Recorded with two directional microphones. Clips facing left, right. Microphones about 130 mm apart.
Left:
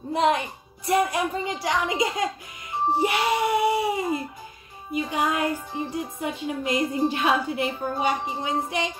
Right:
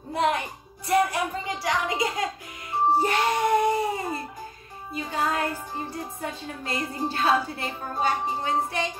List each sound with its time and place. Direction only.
0.1 s speech: 20° left (ahead or behind)
3.0 s music: 10° left (ahead or behind)
4.9 s speech: 15° left (ahead or behind)